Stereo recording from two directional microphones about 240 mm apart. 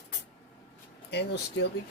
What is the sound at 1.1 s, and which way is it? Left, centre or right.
Speech, left.